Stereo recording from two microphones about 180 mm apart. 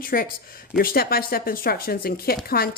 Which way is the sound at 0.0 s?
55° left (ahead or behind).